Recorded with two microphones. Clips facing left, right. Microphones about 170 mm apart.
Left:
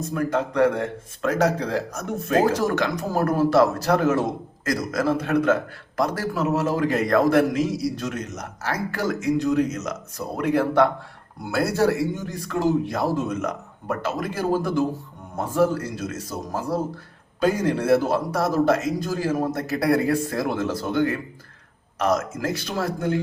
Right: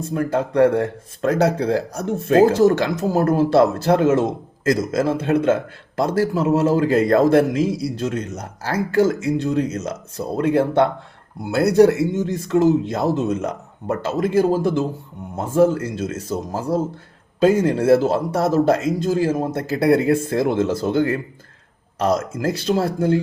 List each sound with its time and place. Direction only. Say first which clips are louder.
0.0 s a man's voice: right 3 dB; 30° right (ahead or behind)